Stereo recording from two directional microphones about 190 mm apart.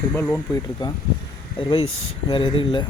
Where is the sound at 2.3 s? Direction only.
25° left (ahead or behind).